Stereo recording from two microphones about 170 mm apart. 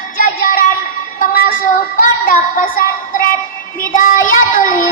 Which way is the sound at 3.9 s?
50° left (ahead or behind).